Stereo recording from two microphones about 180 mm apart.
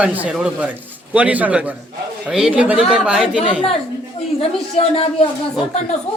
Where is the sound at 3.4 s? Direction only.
30° left (ahead or behind).